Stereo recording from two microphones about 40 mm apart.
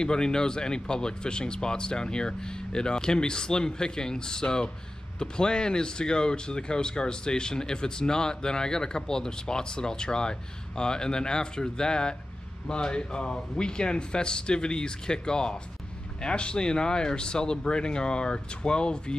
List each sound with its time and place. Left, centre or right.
0.0 s speech: centre